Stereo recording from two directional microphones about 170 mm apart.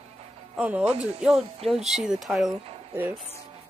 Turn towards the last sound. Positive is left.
turn(degrees=-10)  # may be behind; listen again after turning